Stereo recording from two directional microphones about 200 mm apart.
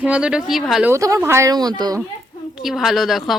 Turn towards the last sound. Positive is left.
turn(degrees=0)  # may be behind; listen again after turning